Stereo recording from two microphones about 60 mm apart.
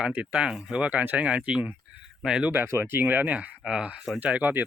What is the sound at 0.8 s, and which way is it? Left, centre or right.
Speech, right.